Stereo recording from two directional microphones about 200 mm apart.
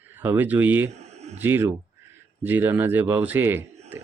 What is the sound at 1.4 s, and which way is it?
Speech, 10° right (ahead or behind).